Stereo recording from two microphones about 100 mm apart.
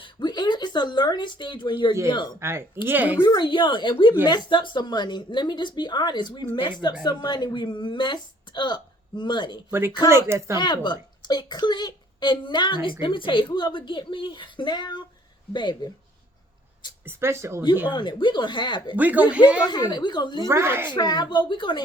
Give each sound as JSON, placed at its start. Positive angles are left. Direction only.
{"t": 0.0, "sound": "speech", "side_deg": 50}
{"t": 2.4, "sound": "speech", "side_deg": -25}
{"t": 3.3, "sound": "a woman's voice", "side_deg": 50}
{"t": 9.7, "sound": "speech", "side_deg": -25}
{"t": 10.6, "sound": "a woman's voice", "side_deg": 50}
{"t": 17.1, "sound": "speech", "side_deg": -25}
{"t": 17.9, "sound": "a woman's voice", "side_deg": 50}
{"t": 18.9, "sound": "speech", "side_deg": -15}
{"t": 19.9, "sound": "a woman's voice", "side_deg": 50}
{"t": 20.5, "sound": "speech", "side_deg": -25}
{"t": 20.9, "sound": "a woman's voice", "side_deg": 45}